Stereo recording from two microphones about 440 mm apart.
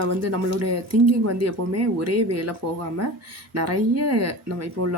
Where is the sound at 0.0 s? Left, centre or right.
Right.